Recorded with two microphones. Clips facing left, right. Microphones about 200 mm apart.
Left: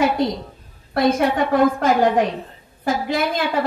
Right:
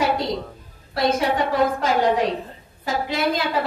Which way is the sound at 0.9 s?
55° left (ahead or behind).